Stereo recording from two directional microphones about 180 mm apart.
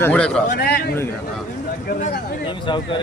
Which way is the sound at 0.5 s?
60° left (ahead or behind).